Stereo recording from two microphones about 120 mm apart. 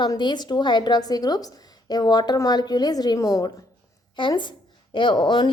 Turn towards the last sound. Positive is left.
turn(degrees=35)  # may be behind; listen again after turning